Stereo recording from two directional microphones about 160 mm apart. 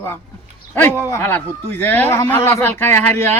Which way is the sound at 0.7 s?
15° left (ahead or behind).